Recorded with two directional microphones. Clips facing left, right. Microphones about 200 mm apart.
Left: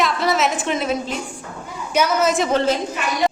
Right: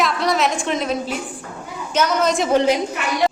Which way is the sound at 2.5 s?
15° right (ahead or behind).